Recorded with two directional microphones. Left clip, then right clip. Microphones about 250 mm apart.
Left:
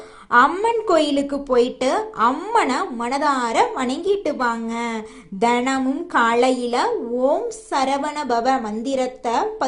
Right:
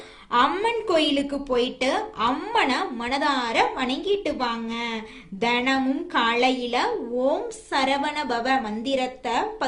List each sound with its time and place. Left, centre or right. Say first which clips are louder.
0.3 s a woman's voice: left 6 dB; centre